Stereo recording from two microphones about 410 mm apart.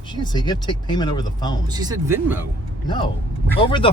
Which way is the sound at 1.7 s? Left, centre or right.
Centre.